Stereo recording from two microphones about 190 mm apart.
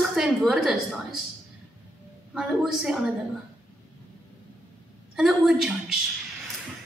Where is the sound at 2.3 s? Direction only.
5° right (ahead or behind).